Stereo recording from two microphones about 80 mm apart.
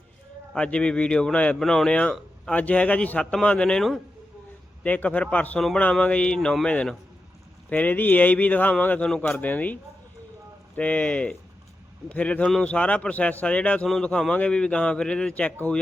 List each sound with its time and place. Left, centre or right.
0.5 s speech: centre
5.5 s speech: centre
7.7 s speech: left
9.0 s speech: centre
9.4 s speech: centre
10.8 s speech: centre